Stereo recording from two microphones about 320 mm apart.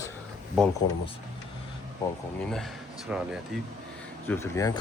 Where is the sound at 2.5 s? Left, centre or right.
Centre.